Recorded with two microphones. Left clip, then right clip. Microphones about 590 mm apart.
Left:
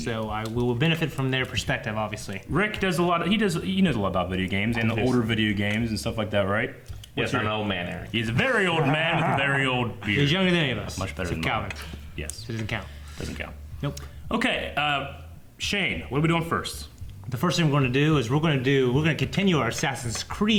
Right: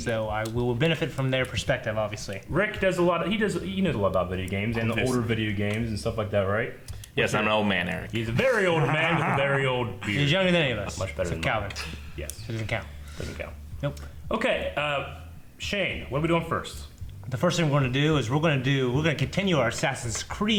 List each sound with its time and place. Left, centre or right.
0.0 s speech: right
2.5 s speech: right
7.2 s speech: left
8.1 s speech: right
10.2 s speech: right
13.8 s speech: right
14.3 s speech: right
17.3 s speech: right